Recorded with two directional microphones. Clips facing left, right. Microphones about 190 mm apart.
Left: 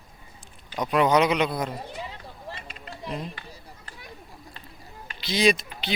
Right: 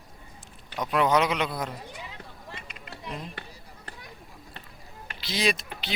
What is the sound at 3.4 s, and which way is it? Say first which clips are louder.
Run: right 2 dB; 65° right (ahead or behind).